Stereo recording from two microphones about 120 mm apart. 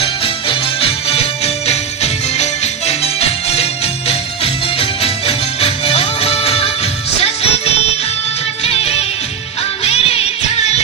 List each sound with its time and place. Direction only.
0.0 s music: 50° left (ahead or behind)